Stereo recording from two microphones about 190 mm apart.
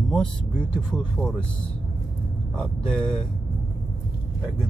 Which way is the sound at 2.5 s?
5° left (ahead or behind).